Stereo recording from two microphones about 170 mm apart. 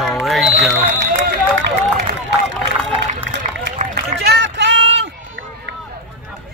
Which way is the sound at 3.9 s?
90° right.